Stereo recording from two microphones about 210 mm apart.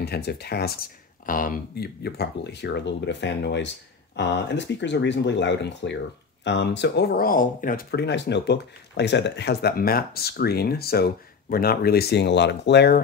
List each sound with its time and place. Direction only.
0.0 s speech: 50° left (ahead or behind)